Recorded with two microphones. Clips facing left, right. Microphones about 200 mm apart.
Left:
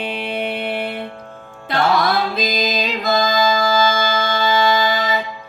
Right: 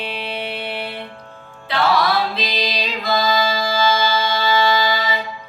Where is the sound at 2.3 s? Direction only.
45° left (ahead or behind).